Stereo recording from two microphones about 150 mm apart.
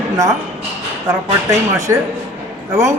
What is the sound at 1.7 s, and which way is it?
Speech, 20° right (ahead or behind).